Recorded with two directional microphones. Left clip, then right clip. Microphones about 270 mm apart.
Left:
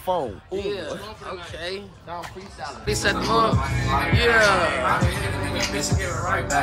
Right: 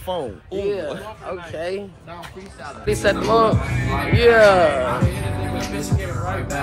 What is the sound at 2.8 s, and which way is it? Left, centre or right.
Speech, centre.